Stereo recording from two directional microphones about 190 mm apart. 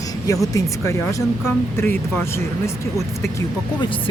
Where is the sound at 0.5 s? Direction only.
15° left (ahead or behind).